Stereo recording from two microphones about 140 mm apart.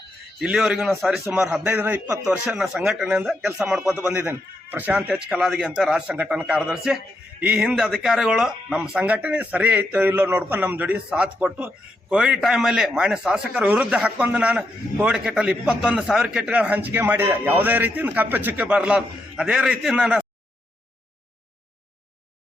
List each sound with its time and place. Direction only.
0.3 s speech: 5° right (ahead or behind)
4.0 s speech: 15° right (ahead or behind)